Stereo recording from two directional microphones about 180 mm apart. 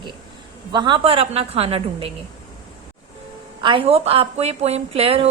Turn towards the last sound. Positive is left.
turn(degrees=-30)  # may be behind; listen again after turning